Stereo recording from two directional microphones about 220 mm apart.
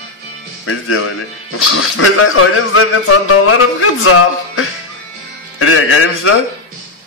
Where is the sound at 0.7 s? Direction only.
70° left (ahead or behind).